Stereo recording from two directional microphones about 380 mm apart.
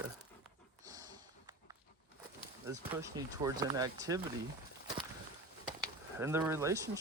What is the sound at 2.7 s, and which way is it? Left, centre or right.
Speech, centre.